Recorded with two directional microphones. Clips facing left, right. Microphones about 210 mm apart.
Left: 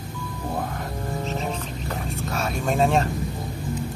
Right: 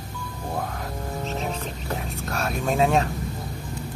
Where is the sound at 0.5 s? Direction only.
Centre (ahead or behind).